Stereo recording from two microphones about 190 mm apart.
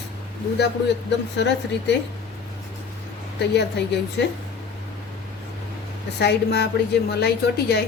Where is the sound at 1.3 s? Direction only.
65° left (ahead or behind).